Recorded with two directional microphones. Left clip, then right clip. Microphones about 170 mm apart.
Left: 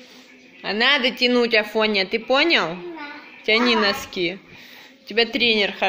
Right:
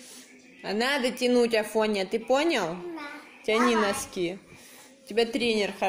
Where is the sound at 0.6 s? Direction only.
15° right (ahead or behind).